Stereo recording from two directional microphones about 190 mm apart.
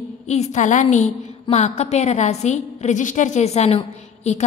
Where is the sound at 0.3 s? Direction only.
35° left (ahead or behind).